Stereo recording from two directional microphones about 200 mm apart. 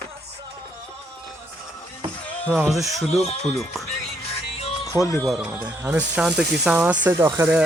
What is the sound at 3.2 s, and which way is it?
Speech, 30° left (ahead or behind).